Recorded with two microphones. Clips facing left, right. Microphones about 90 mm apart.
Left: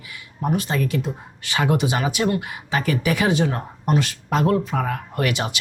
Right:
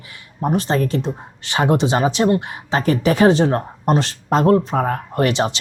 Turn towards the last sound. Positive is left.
turn(degrees=-30)  # may be behind; listen again after turning